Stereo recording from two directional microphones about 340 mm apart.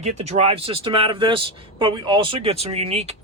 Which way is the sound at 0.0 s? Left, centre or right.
Centre.